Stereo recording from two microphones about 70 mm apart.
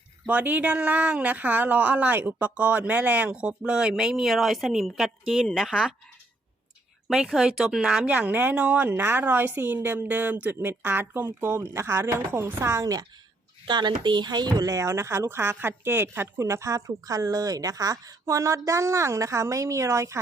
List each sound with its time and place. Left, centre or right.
0.3 s speech: right; by 5.9 s centre
7.1 s speech: centre
8.0 s a woman's voice: centre; by 12.9 s right
13.7 s speech: right